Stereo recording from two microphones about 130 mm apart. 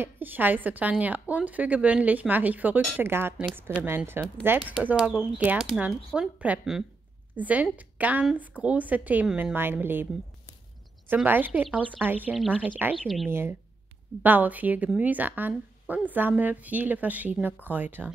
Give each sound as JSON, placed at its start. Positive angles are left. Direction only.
{"t": 0.0, "sound": "a woman's voice", "side_deg": -15}
{"t": 11.2, "sound": "a woman's voice", "side_deg": -15}
{"t": 13.0, "sound": "speech", "side_deg": 0}
{"t": 13.3, "sound": "a woman's voice", "side_deg": -20}